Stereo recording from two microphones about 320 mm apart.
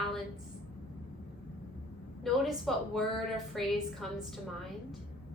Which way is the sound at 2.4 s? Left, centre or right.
Centre.